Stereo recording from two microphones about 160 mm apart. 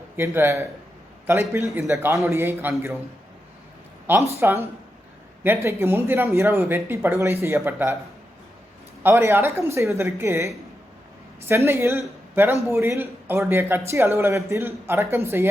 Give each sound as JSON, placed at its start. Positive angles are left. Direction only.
{"t": 0.2, "sound": "speech", "side_deg": -15}
{"t": 4.0, "sound": "a man's voice", "side_deg": -15}
{"t": 9.0, "sound": "speech", "side_deg": -15}